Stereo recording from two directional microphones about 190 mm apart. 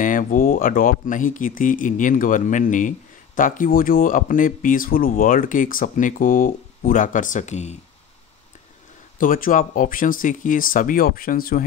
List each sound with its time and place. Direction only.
0.0 s speech: 45° left (ahead or behind)
9.2 s speech: 45° left (ahead or behind)